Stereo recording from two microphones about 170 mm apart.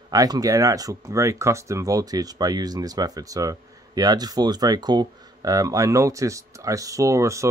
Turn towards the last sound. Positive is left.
turn(degrees=-15)  # may be behind; listen again after turning